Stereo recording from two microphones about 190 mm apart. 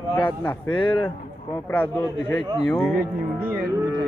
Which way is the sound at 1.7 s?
10° left (ahead or behind).